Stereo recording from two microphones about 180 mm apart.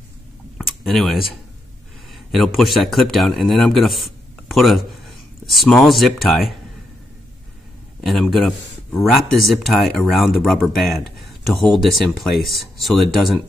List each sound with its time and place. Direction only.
0.6 s a man's voice: centre (ahead or behind)
8.0 s speech: centre (ahead or behind)